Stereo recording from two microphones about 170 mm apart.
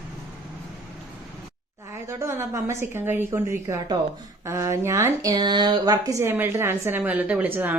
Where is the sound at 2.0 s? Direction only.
15° right (ahead or behind).